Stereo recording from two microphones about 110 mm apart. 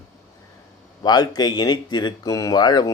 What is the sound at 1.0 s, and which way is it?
Speech, 40° left (ahead or behind).